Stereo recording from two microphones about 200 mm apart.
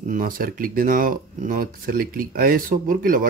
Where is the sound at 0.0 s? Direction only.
40° right (ahead or behind).